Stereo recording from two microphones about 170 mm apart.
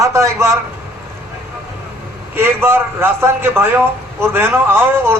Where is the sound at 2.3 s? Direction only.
15° right (ahead or behind).